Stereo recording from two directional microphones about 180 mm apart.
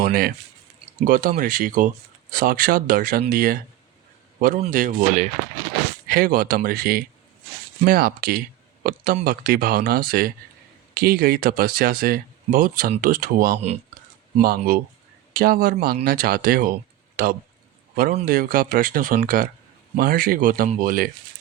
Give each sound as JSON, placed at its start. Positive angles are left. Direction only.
{"t": 0.0, "sound": "a man's voice", "side_deg": -55}
{"t": 6.1, "sound": "speech", "side_deg": -55}